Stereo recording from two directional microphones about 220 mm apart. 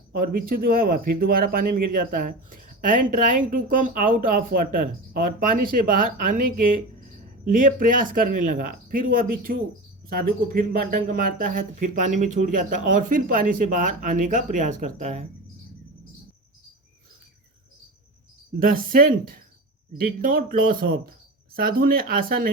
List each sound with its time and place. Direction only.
0.2 s speech: 40° right (ahead or behind)
18.6 s speech: 40° right (ahead or behind)